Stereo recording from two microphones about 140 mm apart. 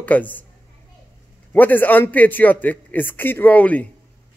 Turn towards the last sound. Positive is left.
turn(degrees=10)  # may be behind; listen again after turning